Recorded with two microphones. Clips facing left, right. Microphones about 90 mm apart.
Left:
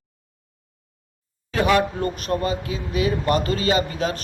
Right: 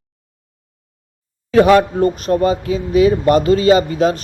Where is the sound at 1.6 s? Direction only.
35° right (ahead or behind).